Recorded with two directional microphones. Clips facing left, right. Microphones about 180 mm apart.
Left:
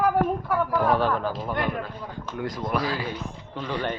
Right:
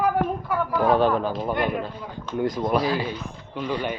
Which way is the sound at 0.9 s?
20° right (ahead or behind).